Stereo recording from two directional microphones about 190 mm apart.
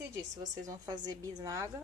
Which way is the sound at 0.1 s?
20° right (ahead or behind).